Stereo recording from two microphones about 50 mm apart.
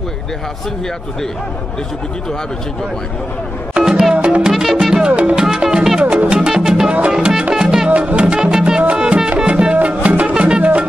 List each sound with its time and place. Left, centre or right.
3.7 s music: centre
4.4 s music: centre
7.9 s music: right
8.3 s music: centre
10.6 s music: right